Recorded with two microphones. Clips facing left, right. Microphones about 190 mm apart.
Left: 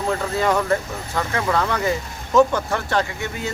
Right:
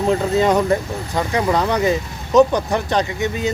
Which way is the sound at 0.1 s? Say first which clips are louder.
Right 5 dB; 20° right (ahead or behind).